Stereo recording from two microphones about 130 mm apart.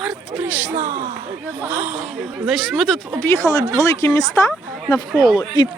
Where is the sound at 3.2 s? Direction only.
20° left (ahead or behind).